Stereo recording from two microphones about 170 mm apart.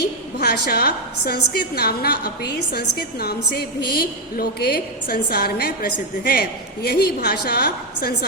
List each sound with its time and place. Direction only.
0.0 s a woman's voice: 65° left (ahead or behind)